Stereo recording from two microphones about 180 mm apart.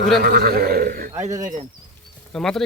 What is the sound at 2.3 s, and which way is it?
Speech, centre (ahead or behind).